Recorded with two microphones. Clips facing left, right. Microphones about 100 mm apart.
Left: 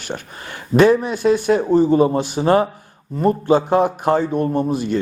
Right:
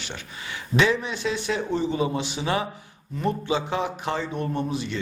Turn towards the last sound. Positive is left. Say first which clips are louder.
# left 9 dB
turn(degrees=45)  # may be behind; listen again after turning